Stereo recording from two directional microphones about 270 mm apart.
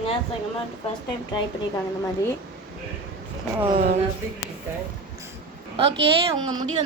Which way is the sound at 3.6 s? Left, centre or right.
Right.